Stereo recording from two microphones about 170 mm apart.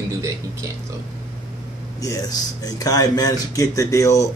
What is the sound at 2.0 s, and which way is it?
Speech, 20° left (ahead or behind).